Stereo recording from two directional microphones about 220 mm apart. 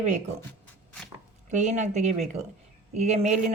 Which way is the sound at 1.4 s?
30° right (ahead or behind).